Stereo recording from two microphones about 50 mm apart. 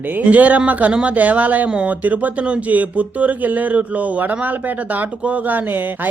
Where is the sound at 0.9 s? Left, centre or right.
Centre.